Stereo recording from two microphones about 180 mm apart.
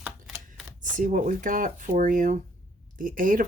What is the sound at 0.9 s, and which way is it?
Speech, 45° right (ahead or behind).